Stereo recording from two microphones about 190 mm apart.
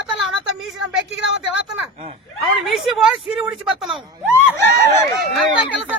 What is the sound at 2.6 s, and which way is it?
Speech, centre (ahead or behind).